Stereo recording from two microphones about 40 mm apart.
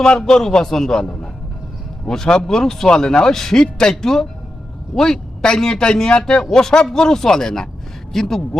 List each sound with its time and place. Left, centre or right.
0.3 s speech: centre